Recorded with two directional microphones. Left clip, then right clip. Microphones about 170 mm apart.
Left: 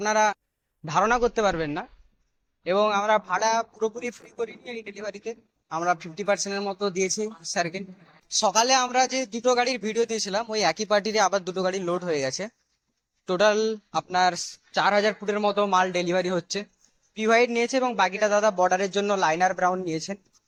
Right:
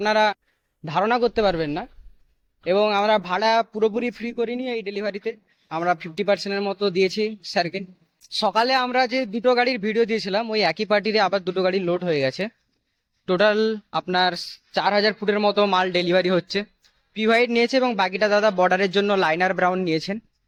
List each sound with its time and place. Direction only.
0.0 s a man's voice: 50° right (ahead or behind)
8.4 s a man's voice: 45° right (ahead or behind)